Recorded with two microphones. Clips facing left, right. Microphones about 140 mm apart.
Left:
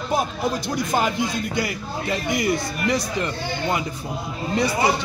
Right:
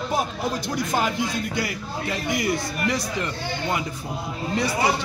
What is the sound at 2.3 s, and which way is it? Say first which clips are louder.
A man's voice: left 2 dB; 20° left (ahead or behind).